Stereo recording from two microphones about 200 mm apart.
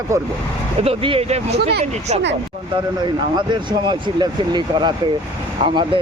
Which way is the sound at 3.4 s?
20° right (ahead or behind).